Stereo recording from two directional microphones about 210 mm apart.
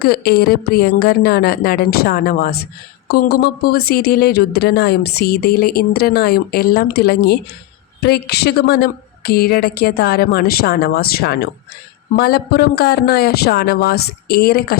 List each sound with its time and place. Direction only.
0.0 s speech: 50° left (ahead or behind)